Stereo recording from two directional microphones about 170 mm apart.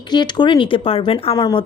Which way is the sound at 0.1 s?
25° left (ahead or behind).